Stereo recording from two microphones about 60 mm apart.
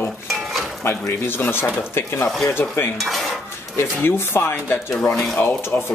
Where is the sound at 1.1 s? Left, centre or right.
Left.